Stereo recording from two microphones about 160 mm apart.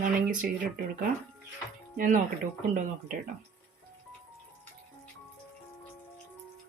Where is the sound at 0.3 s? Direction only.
55° right (ahead or behind).